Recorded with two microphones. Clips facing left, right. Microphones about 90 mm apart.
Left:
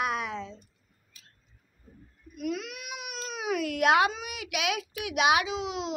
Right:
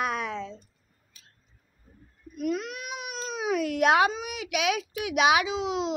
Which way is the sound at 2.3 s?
40° right (ahead or behind).